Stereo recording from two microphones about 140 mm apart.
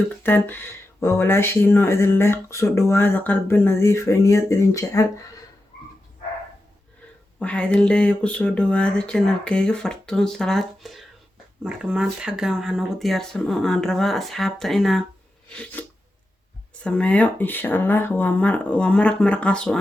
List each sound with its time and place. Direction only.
0.2 s speech: 15° left (ahead or behind)
7.3 s speech: 10° left (ahead or behind)
16.8 s speech: 10° left (ahead or behind)